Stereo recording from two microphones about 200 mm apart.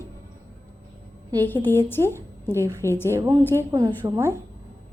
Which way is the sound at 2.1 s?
10° left (ahead or behind).